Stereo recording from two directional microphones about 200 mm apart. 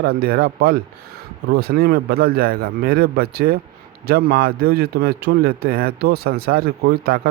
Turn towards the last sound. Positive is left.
turn(degrees=-50)  # may be behind; listen again after turning